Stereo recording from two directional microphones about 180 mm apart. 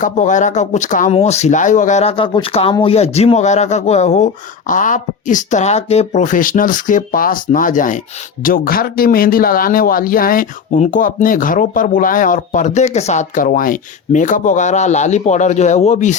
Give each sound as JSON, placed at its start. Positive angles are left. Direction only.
{"t": 0.0, "sound": "speech", "side_deg": 45}